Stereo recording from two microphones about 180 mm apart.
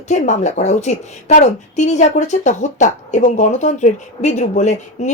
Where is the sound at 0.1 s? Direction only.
40° left (ahead or behind).